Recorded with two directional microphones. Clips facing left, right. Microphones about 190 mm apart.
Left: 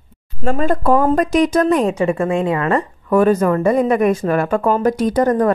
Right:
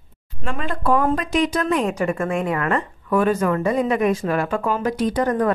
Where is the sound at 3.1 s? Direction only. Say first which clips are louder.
Left 5 dB; 40° left (ahead or behind).